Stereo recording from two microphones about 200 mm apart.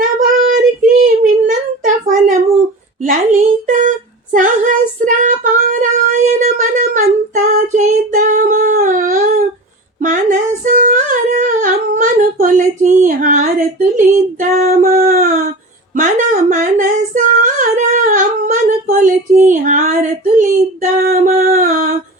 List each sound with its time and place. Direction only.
0.5 s child singing: 40° right (ahead or behind)
3.0 s a sound: 40° right (ahead or behind)
10.0 s female singing: 40° right (ahead or behind)
21.1 s mantra: 45° right (ahead or behind)